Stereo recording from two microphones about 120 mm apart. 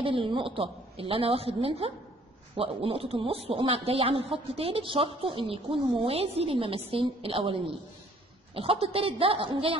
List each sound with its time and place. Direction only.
0.0 s a man's voice: 45° right (ahead or behind)